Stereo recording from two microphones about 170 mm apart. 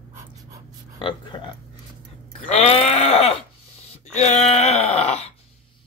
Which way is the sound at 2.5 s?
35° left (ahead or behind).